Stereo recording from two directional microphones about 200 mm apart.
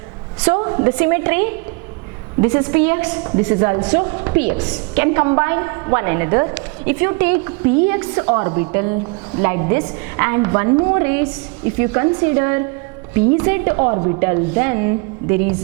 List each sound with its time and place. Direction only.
0.6 s a woman's voice: 20° right (ahead or behind)
13.9 s a woman's voice: 25° right (ahead or behind)
14.2 s a woman's voice: 15° right (ahead or behind)